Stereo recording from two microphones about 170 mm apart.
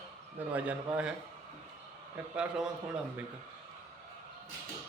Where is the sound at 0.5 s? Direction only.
10° right (ahead or behind).